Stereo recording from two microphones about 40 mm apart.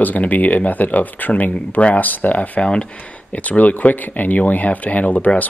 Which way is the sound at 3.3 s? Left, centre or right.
Left.